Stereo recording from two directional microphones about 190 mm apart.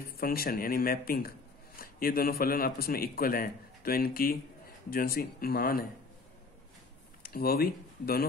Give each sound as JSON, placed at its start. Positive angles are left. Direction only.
{"t": 0.0, "sound": "a man's voice", "side_deg": 50}
{"t": 7.2, "sound": "speech", "side_deg": 55}